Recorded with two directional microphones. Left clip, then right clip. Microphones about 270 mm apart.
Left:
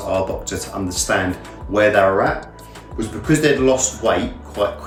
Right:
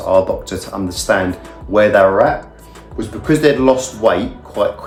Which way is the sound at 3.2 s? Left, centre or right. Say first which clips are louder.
Right 4 dB; centre.